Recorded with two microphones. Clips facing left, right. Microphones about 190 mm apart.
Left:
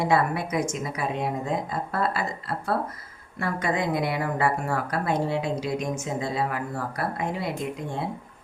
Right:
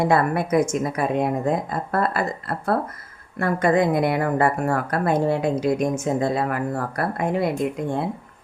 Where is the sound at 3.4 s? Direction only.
55° right (ahead or behind).